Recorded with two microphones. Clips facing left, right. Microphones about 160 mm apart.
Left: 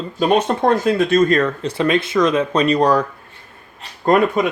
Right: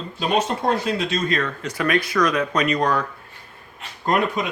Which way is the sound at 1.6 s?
25° left (ahead or behind).